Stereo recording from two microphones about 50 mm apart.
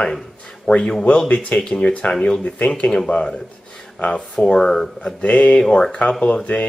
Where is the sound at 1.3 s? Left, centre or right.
Left.